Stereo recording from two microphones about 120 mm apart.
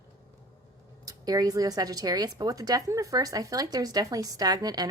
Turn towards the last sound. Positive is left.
turn(degrees=-35)  # may be behind; listen again after turning